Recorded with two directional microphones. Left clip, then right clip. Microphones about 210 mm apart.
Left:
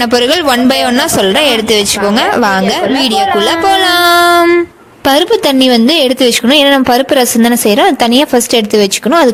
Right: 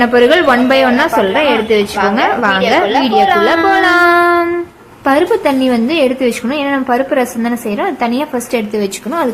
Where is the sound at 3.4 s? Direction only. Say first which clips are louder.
Left 1 dB; 45° left (ahead or behind).